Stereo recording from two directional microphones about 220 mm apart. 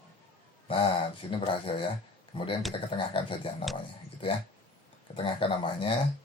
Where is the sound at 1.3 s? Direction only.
25° left (ahead or behind).